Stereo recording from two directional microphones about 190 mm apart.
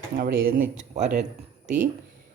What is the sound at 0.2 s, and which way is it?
Speech, 50° right (ahead or behind).